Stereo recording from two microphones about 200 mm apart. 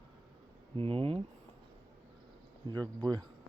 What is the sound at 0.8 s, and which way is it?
Speech, 30° right (ahead or behind).